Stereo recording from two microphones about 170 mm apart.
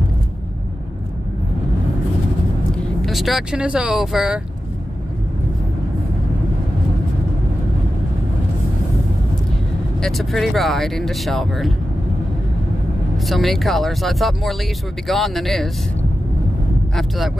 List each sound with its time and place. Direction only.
3.1 s speech: centre (ahead or behind)
9.9 s speech: centre (ahead or behind)
13.3 s speech: centre (ahead or behind)